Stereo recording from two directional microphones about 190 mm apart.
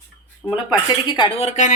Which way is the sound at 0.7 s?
25° left (ahead or behind).